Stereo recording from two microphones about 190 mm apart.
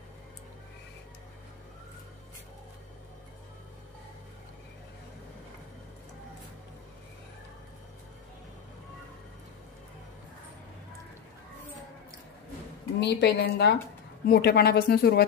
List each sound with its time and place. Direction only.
13.0 s a woman's voice: 60° left (ahead or behind)